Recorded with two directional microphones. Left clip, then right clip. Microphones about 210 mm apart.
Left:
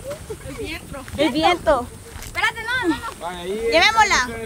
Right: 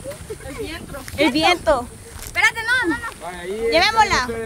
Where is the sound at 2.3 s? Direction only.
55° right (ahead or behind).